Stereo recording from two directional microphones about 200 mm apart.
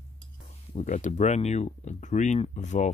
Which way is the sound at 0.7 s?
40° left (ahead or behind).